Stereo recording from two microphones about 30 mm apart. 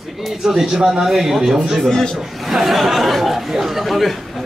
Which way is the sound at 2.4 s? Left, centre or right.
Centre.